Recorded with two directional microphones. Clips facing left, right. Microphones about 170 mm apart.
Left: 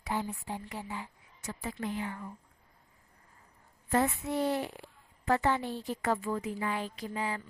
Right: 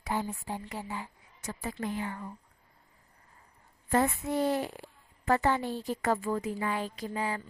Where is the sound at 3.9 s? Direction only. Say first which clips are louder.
Right 2 dB; 45° right (ahead or behind).